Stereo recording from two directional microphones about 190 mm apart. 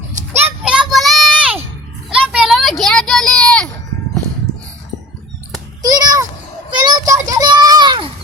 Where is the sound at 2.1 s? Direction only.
5° right (ahead or behind).